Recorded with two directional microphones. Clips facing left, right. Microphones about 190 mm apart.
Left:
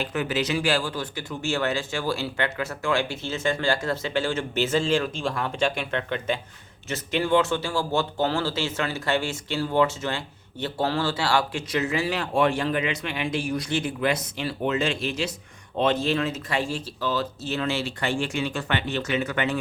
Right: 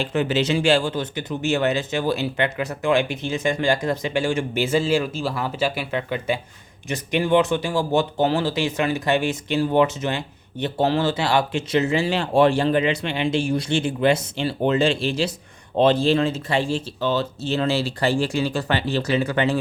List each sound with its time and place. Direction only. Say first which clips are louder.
0.0 s speech: right 5 dB; 25° right (ahead or behind)